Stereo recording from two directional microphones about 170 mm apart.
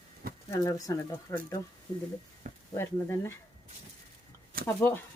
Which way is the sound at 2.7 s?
15° left (ahead or behind).